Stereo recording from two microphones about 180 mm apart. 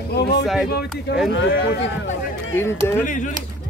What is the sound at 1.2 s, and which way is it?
Speech, 90° left.